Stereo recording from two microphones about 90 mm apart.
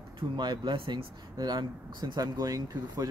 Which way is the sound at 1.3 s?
50° right (ahead or behind).